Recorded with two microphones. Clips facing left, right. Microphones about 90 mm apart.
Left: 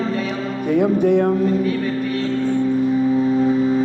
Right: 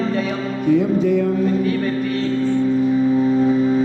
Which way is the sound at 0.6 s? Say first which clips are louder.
Even; 55° left (ahead or behind).